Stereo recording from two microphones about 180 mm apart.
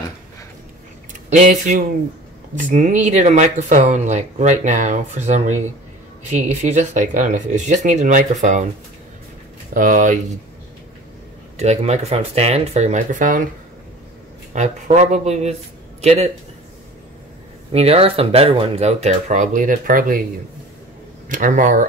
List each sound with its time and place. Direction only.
1.3 s speech: 45° right (ahead or behind)
9.8 s speech: 45° right (ahead or behind)
11.5 s speech: 40° right (ahead or behind)
14.5 s speech: 40° right (ahead or behind)
17.7 s speech: 35° right (ahead or behind); by 20.2 s 50° right (ahead or behind)
21.3 s speech: 45° right (ahead or behind)